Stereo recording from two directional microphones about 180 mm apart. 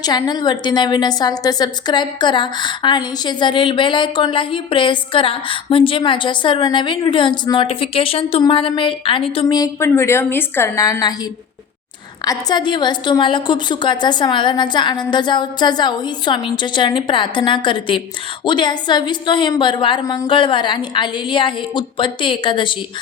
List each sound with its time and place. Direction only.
0.0 s a woman's voice: 20° left (ahead or behind)
12.2 s a woman's voice: 20° left (ahead or behind)